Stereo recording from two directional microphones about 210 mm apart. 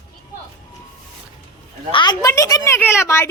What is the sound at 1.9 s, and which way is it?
A woman's voice, 20° left (ahead or behind).